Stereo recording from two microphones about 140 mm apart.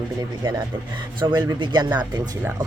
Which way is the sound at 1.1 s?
35° right (ahead or behind).